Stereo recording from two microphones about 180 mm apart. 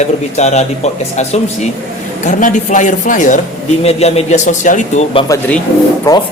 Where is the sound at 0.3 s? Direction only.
40° left (ahead or behind).